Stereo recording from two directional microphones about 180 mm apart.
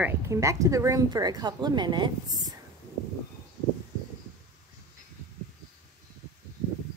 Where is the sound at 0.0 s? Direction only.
15° right (ahead or behind).